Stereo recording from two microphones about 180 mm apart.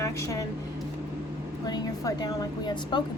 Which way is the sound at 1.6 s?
20° left (ahead or behind).